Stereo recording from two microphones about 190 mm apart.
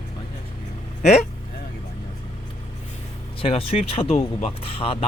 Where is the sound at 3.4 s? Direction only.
30° left (ahead or behind).